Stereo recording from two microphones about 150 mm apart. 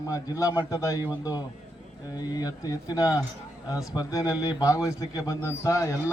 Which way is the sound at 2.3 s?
25° left (ahead or behind).